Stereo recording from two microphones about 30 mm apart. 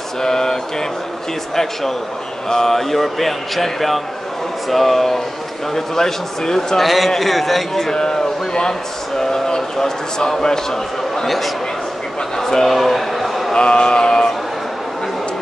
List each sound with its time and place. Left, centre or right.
0.2 s a man's voice: centre
6.8 s a man's voice: centre
7.8 s speech: left
11.2 s a man's voice: centre
12.4 s a sound: centre
12.6 s a sound: centre
13.6 s speech: left